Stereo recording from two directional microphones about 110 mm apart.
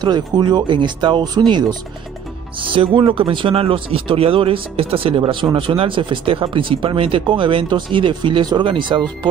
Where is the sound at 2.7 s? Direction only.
50° right (ahead or behind).